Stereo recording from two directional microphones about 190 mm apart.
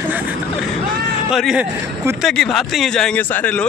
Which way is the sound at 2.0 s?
10° right (ahead or behind).